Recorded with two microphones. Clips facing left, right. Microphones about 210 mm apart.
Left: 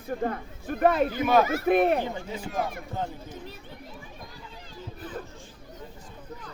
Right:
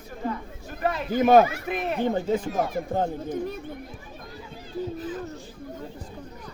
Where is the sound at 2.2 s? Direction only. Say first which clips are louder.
Right 7 dB; 50° right (ahead or behind).